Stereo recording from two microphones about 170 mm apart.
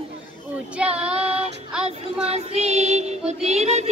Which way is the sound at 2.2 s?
40° right (ahead or behind).